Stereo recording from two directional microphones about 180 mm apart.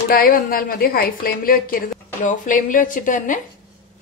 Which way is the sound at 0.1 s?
55° left (ahead or behind).